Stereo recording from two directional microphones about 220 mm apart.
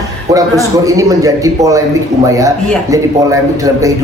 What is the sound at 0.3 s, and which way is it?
A man's voice, 15° right (ahead or behind).